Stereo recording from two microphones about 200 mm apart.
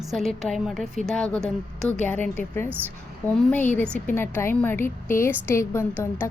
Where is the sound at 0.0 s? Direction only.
Centre (ahead or behind).